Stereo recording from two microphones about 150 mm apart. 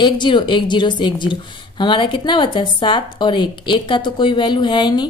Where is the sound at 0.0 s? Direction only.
30° left (ahead or behind).